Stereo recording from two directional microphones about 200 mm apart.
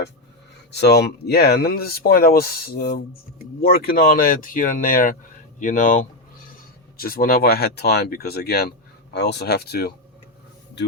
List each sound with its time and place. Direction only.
0.7 s speech: 55° left (ahead or behind)